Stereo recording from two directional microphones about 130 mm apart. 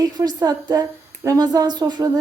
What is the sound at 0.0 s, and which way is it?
A woman's voice, 30° right (ahead or behind).